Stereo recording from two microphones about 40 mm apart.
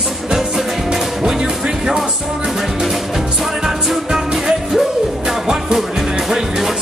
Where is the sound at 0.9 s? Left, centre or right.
Centre.